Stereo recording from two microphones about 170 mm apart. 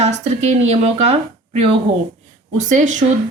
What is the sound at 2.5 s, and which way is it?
Speech, 45° right (ahead or behind).